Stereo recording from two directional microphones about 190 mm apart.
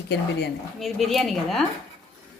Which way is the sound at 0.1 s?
65° left (ahead or behind).